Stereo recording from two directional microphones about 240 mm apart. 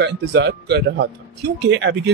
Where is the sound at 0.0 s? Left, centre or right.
Right.